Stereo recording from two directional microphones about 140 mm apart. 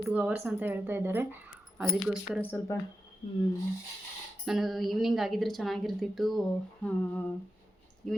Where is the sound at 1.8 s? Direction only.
Centre (ahead or behind).